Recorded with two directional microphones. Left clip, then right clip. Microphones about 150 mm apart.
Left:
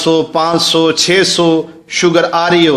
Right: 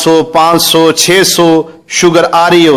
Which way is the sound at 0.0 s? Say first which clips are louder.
Right 5 dB; 45° right (ahead or behind).